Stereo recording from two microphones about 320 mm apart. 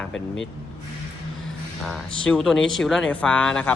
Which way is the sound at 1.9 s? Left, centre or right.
Centre.